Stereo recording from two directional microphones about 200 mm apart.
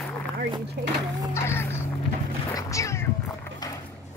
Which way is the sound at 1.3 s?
15° left (ahead or behind).